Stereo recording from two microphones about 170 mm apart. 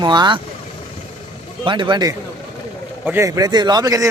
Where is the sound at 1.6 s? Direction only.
30° right (ahead or behind).